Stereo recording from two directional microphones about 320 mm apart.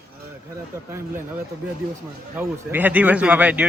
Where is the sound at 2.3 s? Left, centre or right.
Centre.